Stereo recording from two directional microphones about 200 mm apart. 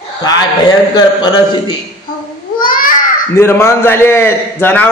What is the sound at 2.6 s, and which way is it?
Babbling, 45° left (ahead or behind).